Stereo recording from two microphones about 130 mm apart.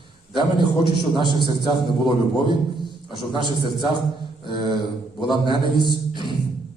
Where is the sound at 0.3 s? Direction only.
35° right (ahead or behind).